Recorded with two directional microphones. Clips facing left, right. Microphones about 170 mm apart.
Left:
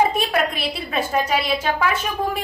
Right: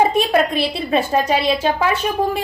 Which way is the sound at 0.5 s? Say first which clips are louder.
Right 7 dB; 30° right (ahead or behind).